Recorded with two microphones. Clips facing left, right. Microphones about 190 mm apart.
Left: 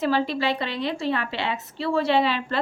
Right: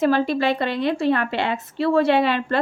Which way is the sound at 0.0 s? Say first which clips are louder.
Right 4 dB; 50° right (ahead or behind).